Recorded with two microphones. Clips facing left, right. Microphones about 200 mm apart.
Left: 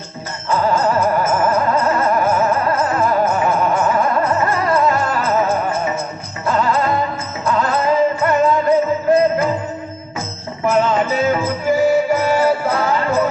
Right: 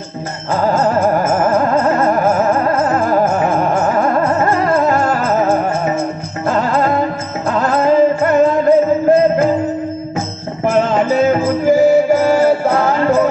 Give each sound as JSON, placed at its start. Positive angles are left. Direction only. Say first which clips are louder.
{"t": 0.5, "sound": "music", "louder": "right 2 dB", "side_deg": -45}
{"t": 10.6, "sound": "music", "louder": "right 2 dB", "side_deg": -45}